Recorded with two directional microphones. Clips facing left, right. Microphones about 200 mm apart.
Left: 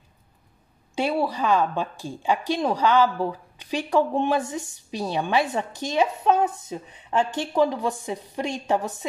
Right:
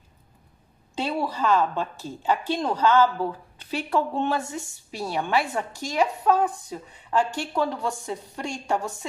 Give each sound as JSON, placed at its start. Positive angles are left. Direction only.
{"t": 0.9, "sound": "a woman's voice", "side_deg": 10}